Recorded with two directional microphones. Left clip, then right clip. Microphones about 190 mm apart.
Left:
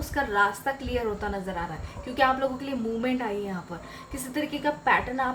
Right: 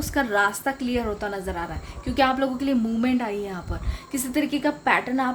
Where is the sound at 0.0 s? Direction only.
50° right (ahead or behind).